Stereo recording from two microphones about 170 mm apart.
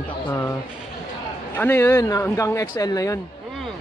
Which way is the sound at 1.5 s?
10° left (ahead or behind).